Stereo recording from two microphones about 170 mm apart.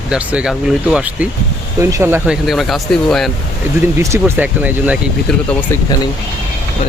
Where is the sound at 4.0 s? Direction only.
15° right (ahead or behind).